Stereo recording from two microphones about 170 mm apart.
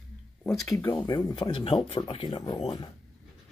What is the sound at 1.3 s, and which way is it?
Speech, 30° left (ahead or behind).